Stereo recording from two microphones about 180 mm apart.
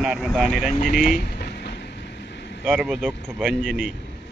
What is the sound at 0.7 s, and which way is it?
Speech, 45° left (ahead or behind).